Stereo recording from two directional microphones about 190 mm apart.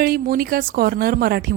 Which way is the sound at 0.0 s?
50° right (ahead or behind).